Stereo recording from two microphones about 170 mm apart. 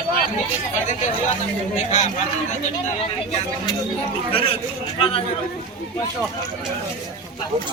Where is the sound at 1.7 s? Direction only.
45° left (ahead or behind).